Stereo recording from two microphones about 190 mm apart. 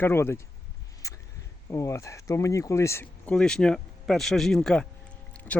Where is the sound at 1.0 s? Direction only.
15° left (ahead or behind).